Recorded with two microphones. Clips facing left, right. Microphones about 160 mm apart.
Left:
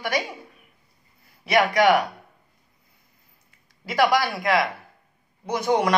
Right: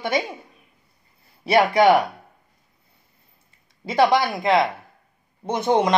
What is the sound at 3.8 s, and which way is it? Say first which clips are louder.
A woman's voice: right 3 dB; 25° right (ahead or behind).